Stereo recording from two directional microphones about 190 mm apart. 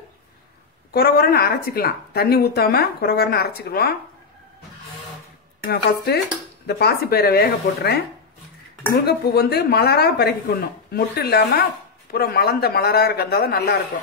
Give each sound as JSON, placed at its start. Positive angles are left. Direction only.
{"t": 0.9, "sound": "speech", "side_deg": 55}
{"t": 5.7, "sound": "speech", "side_deg": 60}
{"t": 9.0, "sound": "speech", "side_deg": 55}